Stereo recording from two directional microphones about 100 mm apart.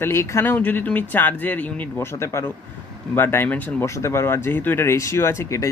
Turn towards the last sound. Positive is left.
turn(degrees=30)  # may be behind; listen again after turning